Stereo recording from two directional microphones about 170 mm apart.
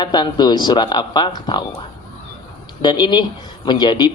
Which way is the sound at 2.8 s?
25° left (ahead or behind).